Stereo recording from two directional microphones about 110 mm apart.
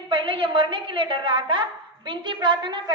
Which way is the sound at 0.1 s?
45° right (ahead or behind).